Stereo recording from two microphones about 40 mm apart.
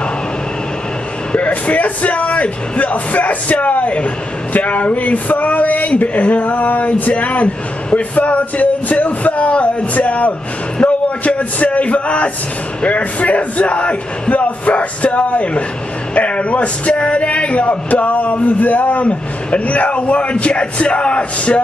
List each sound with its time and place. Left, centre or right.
1.3 s a man's voice: left